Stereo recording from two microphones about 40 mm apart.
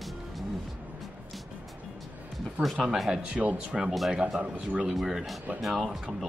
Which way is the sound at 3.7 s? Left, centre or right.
Centre.